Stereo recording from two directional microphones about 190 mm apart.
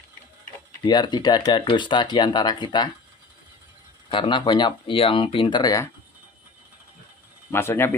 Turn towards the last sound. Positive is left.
turn(degrees=15)  # may be behind; listen again after turning